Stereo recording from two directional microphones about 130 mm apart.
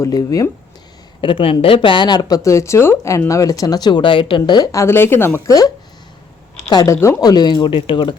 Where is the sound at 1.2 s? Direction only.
40° left (ahead or behind).